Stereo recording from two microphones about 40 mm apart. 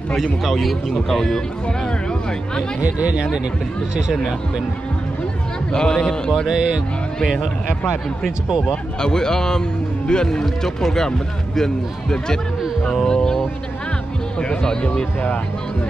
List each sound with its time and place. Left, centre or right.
0.1 s a man's voice: centre
2.8 s speech: right
5.7 s speech: centre
6.5 s speech: right
9.0 s speech: centre
13.1 s a sound: centre
14.4 s speech: left